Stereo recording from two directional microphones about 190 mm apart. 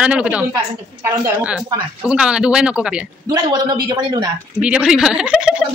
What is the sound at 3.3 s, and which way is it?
A man's voice, 20° right (ahead or behind).